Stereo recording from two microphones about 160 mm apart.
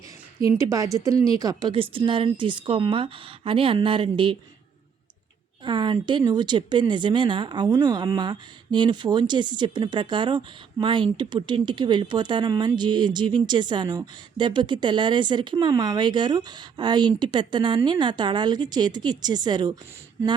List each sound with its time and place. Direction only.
0.3 s speech: 20° right (ahead or behind)
1.7 s a woman's voice: 35° right (ahead or behind)
5.6 s speech: 30° right (ahead or behind)